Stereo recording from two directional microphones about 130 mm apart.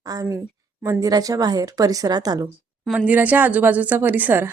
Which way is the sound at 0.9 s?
25° right (ahead or behind).